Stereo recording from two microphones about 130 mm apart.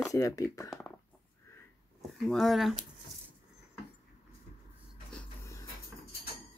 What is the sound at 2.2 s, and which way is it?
Speech, centre (ahead or behind).